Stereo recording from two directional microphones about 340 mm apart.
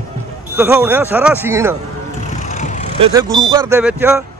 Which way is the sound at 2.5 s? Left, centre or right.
Left.